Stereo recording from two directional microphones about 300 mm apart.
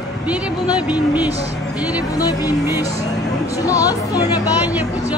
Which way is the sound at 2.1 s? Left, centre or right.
Centre.